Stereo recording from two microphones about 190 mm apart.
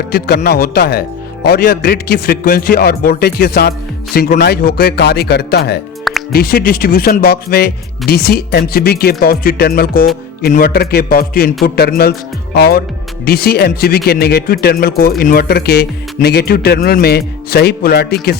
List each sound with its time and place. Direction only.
0.1 s a man's voice: 55° left (ahead or behind)